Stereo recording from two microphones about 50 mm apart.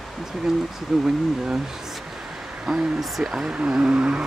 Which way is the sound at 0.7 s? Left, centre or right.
Centre.